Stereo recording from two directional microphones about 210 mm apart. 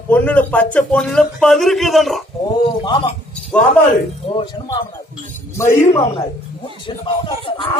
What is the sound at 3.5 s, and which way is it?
Speech, 5° left (ahead or behind).